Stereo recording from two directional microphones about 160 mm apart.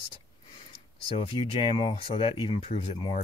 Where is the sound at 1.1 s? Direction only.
35° left (ahead or behind).